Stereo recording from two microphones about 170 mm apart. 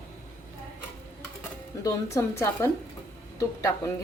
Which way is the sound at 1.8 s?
15° left (ahead or behind).